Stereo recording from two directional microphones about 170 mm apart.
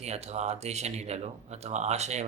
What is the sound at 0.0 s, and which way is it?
Speech, 40° right (ahead or behind).